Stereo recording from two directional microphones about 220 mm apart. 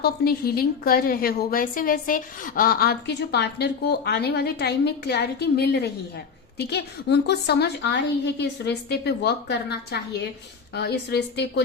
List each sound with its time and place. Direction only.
0.0 s a woman's voice: 45° left (ahead or behind)